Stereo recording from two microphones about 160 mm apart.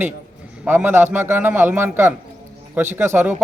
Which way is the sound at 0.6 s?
10° right (ahead or behind).